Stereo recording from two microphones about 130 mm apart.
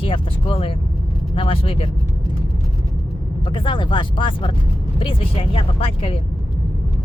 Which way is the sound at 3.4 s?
40° left (ahead or behind).